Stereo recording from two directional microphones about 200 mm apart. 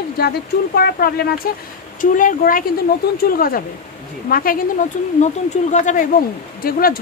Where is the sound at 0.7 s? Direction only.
50° left (ahead or behind).